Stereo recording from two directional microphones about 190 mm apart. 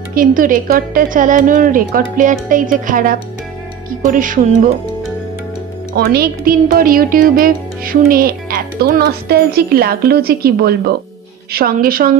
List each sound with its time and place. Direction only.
0.1 s speech: 45° right (ahead or behind)
5.9 s speech: 55° right (ahead or behind)